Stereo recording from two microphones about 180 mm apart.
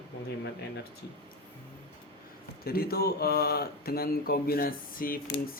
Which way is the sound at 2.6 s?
55° left (ahead or behind).